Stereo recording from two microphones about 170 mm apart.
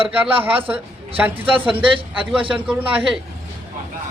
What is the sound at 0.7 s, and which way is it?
A man's voice, 10° right (ahead or behind).